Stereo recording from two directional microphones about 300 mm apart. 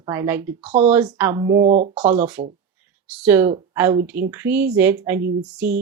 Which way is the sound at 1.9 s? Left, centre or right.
Centre.